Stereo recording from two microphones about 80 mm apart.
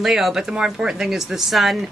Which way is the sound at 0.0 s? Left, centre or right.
Centre.